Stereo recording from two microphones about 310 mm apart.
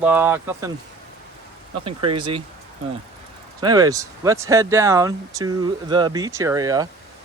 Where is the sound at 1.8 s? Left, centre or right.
Centre.